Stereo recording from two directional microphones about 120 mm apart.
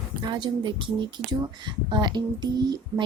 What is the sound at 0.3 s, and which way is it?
Speech, 40° right (ahead or behind).